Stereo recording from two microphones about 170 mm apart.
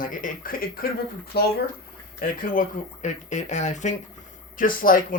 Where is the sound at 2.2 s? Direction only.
55° left (ahead or behind).